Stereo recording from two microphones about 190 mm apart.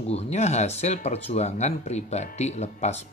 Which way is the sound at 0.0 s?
35° left (ahead or behind).